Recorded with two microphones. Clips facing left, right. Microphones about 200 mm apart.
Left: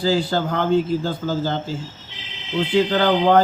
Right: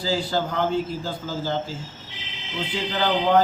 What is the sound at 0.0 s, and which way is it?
Mantra, 60° left (ahead or behind).